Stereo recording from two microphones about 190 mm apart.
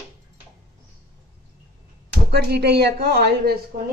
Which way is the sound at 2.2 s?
60° right (ahead or behind).